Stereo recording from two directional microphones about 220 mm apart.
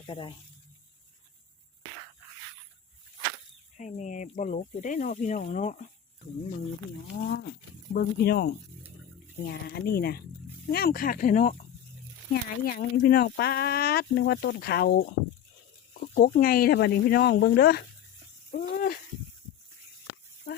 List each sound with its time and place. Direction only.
0.0 s speech: 20° left (ahead or behind)
3.8 s speech: 35° left (ahead or behind)
7.1 s speech: 45° left (ahead or behind)
16.1 s speech: 40° left (ahead or behind)